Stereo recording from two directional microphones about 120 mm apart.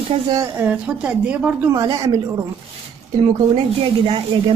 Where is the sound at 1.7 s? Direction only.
30° right (ahead or behind).